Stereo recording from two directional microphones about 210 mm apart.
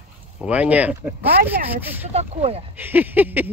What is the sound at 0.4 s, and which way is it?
Speech, 5° right (ahead or behind).